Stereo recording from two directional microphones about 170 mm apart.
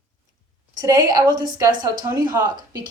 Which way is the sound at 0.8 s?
20° right (ahead or behind).